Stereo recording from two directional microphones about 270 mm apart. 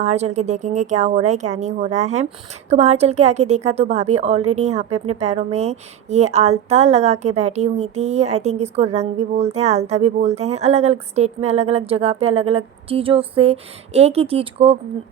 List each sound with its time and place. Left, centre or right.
0.0 s a woman's voice: right